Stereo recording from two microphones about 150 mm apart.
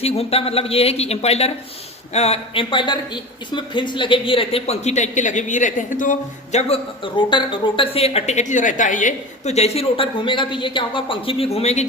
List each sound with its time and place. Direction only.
0.0 s speech: 40° left (ahead or behind)